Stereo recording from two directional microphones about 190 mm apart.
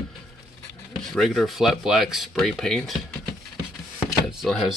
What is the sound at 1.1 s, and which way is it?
Speech, centre (ahead or behind).